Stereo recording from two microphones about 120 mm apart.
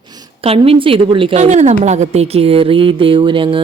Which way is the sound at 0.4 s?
55° right (ahead or behind).